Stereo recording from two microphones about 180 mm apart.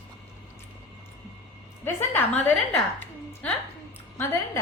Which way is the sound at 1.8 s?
10° left (ahead or behind).